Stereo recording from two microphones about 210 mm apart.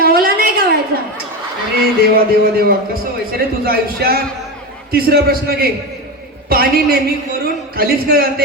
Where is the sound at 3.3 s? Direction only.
45° right (ahead or behind).